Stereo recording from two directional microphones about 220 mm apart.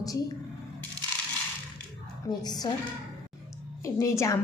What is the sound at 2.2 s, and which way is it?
Speech, 20° left (ahead or behind).